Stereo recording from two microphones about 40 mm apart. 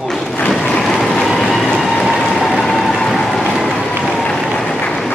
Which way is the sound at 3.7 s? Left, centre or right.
Centre.